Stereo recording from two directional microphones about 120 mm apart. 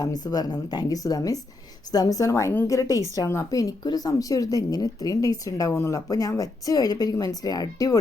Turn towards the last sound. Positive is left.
turn(degrees=30)  # may be behind; listen again after turning